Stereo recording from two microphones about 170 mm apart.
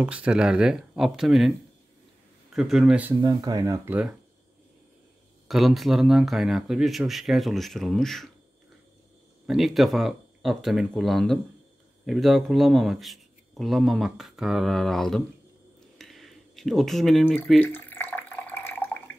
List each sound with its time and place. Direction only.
0.0 s speech: 10° right (ahead or behind)
2.5 s speech: 5° right (ahead or behind)
3.2 s speech: 25° right (ahead or behind)
5.5 s speech: centre (ahead or behind)
9.5 s speech: centre (ahead or behind)
16.0 s a sound: centre (ahead or behind)
17.6 s water: 10° left (ahead or behind)